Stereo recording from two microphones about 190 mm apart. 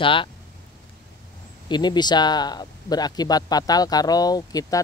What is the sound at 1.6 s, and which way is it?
Speech, 25° left (ahead or behind).